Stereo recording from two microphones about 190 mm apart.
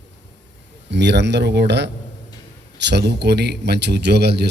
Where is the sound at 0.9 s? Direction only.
65° right (ahead or behind).